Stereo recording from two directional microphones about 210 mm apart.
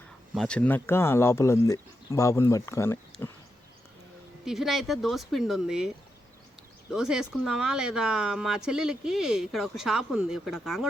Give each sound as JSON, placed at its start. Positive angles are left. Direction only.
{"t": 0.3, "sound": "speech", "side_deg": 5}
{"t": 4.4, "sound": "speech", "side_deg": 0}
{"t": 6.9, "sound": "speech", "side_deg": -5}